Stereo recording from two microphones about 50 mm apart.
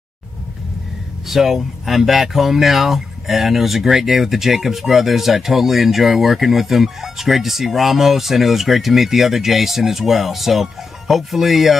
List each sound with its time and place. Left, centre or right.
1.2 s speech: centre